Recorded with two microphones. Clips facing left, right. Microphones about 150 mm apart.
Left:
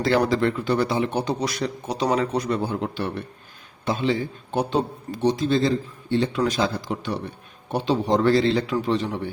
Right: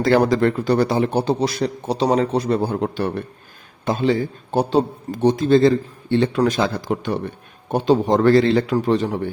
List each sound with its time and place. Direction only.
0.0 s a man's voice: 45° right (ahead or behind)
5.2 s a man's voice: 50° right (ahead or behind)